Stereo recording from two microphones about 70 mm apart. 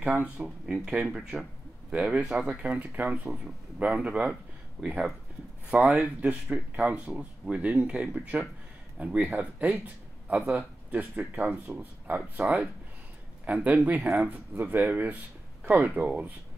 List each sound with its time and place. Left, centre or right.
0.0 s speech: centre
0.7 s speech: centre; by 3.2 s right
3.3 s speech: centre